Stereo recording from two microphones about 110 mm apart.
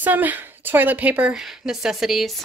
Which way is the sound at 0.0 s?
15° right (ahead or behind).